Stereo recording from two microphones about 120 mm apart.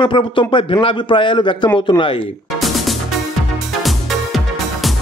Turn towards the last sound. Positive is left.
turn(degrees=0)  # may be behind; listen again after turning